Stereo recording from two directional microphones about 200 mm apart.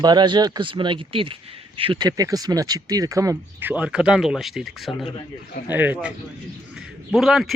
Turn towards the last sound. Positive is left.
turn(degrees=0)  # may be behind; listen again after turning